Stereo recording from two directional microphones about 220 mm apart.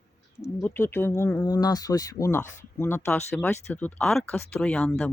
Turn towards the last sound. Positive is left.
turn(degrees=5)  # may be behind; listen again after turning